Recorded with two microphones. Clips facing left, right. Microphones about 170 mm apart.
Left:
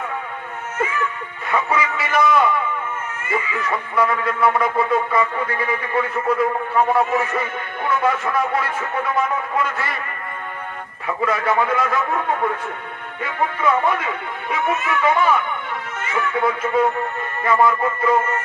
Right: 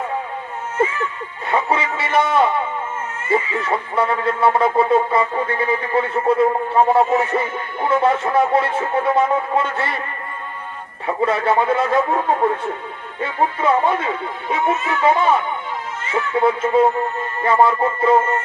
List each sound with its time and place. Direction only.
0.8 s a sound: 30° right (ahead or behind)
1.5 s speech: 30° right (ahead or behind)
11.0 s speech: 30° right (ahead or behind)